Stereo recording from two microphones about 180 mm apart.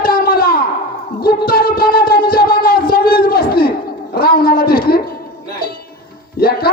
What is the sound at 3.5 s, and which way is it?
Chuckle, 60° left (ahead or behind).